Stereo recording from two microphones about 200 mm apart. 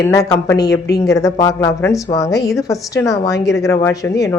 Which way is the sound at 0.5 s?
55° left (ahead or behind).